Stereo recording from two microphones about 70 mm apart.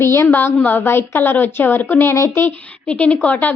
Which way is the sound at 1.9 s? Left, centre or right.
Left.